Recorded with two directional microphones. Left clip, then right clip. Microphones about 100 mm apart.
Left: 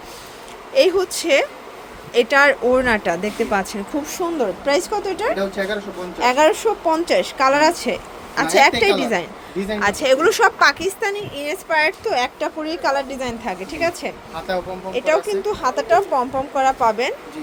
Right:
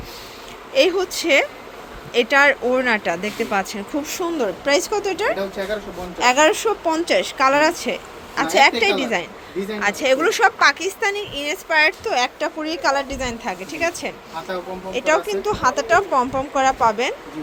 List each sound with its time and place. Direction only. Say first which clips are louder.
0.7 s a woman's voice: left 2 dB; 20° left (ahead or behind); by 10.5 s 40° left (ahead or behind)
10.6 s a woman's voice: left 1 dB; 20° left (ahead or behind)